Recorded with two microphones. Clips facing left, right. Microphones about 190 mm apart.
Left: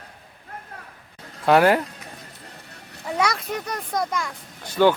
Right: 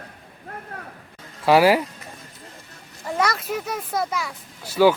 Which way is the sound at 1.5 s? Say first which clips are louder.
Right 1 dB; 5° right (ahead or behind).